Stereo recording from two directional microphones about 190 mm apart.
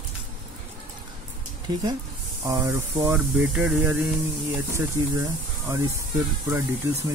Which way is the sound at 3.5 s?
Centre (ahead or behind).